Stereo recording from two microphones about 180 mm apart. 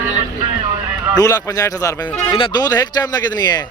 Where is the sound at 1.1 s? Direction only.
20° left (ahead or behind).